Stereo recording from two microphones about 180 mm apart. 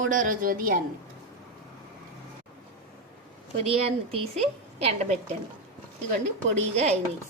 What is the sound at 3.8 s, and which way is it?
A woman's voice, 35° right (ahead or behind).